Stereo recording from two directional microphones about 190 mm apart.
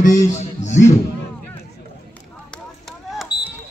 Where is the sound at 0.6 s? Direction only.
40° left (ahead or behind).